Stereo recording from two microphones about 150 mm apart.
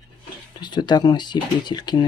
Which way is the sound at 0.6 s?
30° left (ahead or behind).